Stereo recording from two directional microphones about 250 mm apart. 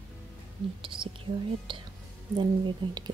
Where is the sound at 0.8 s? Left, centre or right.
Centre.